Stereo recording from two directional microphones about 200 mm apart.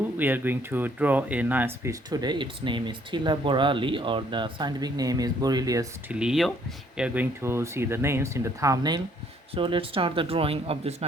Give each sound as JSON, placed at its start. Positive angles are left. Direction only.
{"t": 0.2, "sound": "speech", "side_deg": -10}
{"t": 6.1, "sound": "speech", "side_deg": -5}